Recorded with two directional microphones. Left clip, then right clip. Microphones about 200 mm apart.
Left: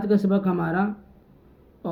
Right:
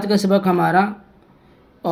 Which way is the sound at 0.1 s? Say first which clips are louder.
Right 7 dB; 40° right (ahead or behind).